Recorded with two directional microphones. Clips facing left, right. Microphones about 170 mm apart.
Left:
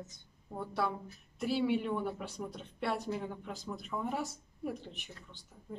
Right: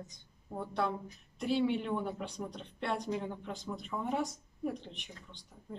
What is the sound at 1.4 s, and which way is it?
Speech, 5° left (ahead or behind).